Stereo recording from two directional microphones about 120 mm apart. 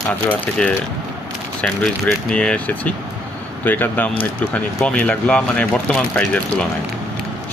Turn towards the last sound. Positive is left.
turn(degrees=10)  # may be behind; listen again after turning